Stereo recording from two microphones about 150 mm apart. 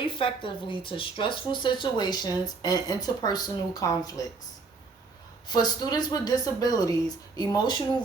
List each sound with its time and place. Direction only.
0.0 s speech: 35° left (ahead or behind)
5.5 s speech: 30° left (ahead or behind)